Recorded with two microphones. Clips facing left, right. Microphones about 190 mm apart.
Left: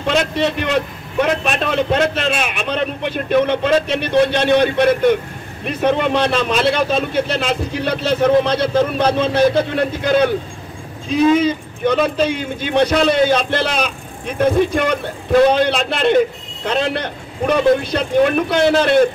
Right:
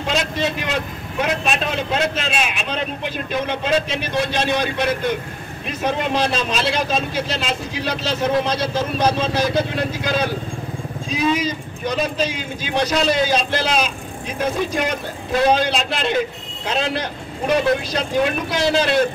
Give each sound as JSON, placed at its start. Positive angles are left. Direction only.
{"t": 0.0, "sound": "a man's voice", "side_deg": 60}